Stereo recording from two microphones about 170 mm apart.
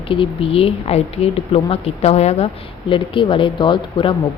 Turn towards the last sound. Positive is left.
turn(degrees=30)  # may be behind; listen again after turning